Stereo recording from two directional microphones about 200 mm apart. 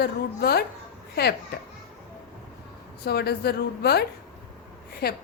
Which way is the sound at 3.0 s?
55° left (ahead or behind).